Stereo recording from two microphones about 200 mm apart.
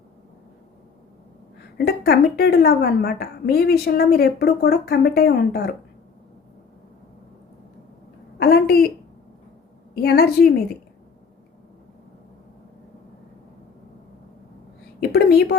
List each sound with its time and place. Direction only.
1.8 s a woman's voice: 55° left (ahead or behind)
8.4 s a woman's voice: 50° left (ahead or behind)
10.0 s a woman's voice: 50° left (ahead or behind)
15.1 s a sound: 55° left (ahead or behind)